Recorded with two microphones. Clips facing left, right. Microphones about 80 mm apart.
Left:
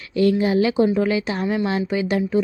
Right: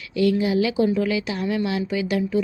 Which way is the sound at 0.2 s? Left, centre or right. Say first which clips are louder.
Left 2 dB; left.